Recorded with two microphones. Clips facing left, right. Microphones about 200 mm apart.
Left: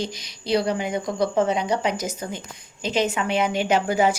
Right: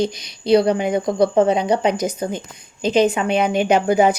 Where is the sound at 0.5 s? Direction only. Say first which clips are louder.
Right 7 dB; 30° right (ahead or behind).